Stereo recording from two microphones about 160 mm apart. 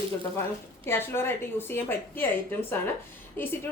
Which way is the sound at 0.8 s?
15° left (ahead or behind).